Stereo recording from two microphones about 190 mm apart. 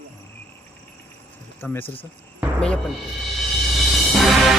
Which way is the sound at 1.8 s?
30° left (ahead or behind).